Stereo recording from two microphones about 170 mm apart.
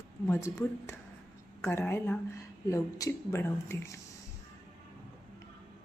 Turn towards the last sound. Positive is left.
turn(degrees=15)  # may be behind; listen again after turning